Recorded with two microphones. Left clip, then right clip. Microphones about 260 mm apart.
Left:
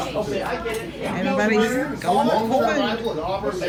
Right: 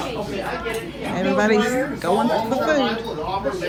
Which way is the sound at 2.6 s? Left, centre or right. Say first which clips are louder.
Right 2 dB; centre.